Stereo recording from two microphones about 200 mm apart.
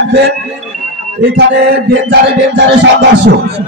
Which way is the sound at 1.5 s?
55° right (ahead or behind).